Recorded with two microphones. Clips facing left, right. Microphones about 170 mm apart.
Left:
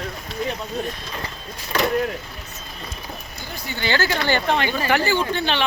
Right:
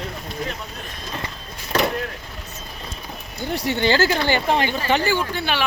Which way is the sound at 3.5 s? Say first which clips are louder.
Right 10 dB; 80° right.